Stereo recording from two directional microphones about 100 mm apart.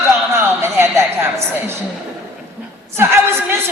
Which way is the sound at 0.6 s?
25° right (ahead or behind).